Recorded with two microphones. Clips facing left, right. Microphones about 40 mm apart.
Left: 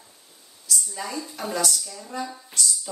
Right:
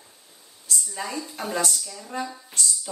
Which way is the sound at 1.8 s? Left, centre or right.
Centre.